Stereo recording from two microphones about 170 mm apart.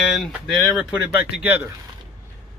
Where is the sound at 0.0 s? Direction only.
Centre (ahead or behind).